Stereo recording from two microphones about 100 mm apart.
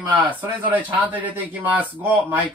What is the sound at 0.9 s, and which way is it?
Speech, 15° right (ahead or behind).